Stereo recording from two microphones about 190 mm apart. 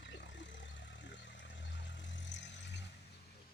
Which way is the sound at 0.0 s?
70° left (ahead or behind).